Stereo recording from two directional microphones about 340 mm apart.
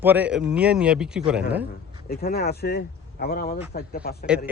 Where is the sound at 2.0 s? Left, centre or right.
Left.